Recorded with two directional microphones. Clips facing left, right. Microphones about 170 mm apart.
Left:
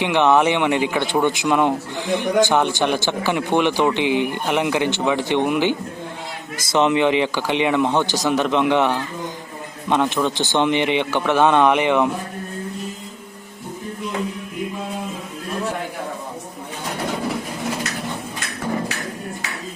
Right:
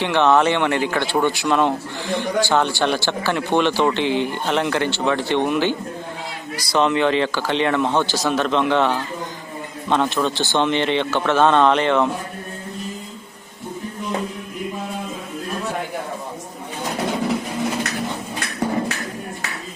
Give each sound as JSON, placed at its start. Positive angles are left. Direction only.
{"t": 0.0, "sound": "speech", "side_deg": 15}